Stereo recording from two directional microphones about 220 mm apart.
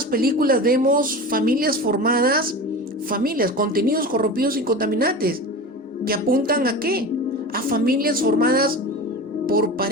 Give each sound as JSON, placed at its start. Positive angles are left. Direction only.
{"t": 0.1, "sound": "a woman's voice", "side_deg": -40}